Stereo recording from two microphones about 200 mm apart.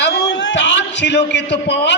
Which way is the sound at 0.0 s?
60° left (ahead or behind).